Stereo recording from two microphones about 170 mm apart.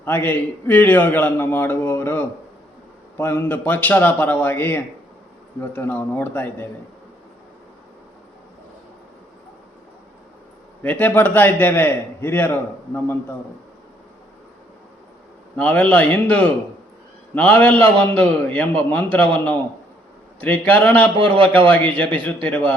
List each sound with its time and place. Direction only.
0.0 s a man's voice: 10° left (ahead or behind)
10.8 s a man's voice: 10° left (ahead or behind)
15.5 s a man's voice: 10° left (ahead or behind)
21.2 s a man's voice: 30° right (ahead or behind)
21.7 s a man's voice: 10° left (ahead or behind)